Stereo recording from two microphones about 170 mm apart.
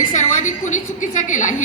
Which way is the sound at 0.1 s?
45° left (ahead or behind).